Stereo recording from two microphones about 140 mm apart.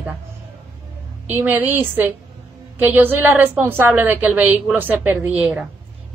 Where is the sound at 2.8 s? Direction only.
15° right (ahead or behind).